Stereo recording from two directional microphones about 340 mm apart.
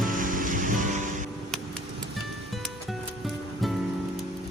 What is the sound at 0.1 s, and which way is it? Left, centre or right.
Music, right.